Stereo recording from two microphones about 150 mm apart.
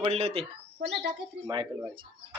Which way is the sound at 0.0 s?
40° right (ahead or behind).